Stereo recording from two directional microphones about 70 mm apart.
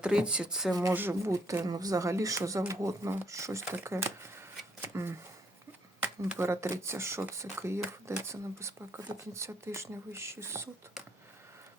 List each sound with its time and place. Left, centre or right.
0.0 s speech: centre
0.7 s speech: right
1.6 s speech: right